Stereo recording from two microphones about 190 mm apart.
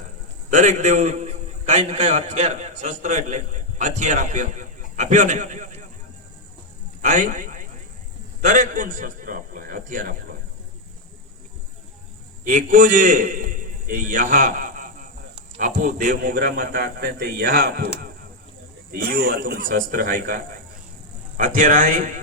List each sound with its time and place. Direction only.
0.5 s a man's voice: 40° right (ahead or behind)
7.0 s a man's voice: 45° right (ahead or behind)
12.5 s a man's voice: 45° right (ahead or behind)